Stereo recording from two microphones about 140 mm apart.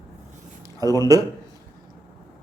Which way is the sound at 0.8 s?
25° right (ahead or behind).